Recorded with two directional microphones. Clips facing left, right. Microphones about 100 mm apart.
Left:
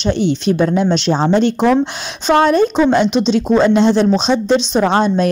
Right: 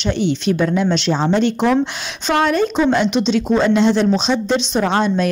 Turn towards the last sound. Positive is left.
turn(degrees=30)  # may be behind; listen again after turning